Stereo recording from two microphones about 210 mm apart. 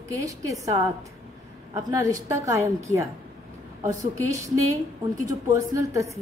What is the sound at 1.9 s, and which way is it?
A woman's voice, 15° right (ahead or behind).